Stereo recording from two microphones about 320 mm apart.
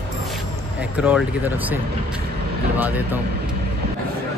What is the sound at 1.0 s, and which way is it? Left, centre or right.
Speech, centre.